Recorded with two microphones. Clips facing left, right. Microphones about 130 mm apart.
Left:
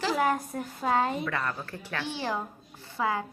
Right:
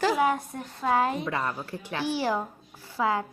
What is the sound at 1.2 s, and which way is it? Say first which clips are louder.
A woman's voice: right 2 dB; 20° right (ahead or behind).